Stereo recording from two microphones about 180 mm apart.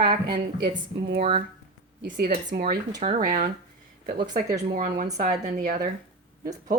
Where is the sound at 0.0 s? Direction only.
25° right (ahead or behind).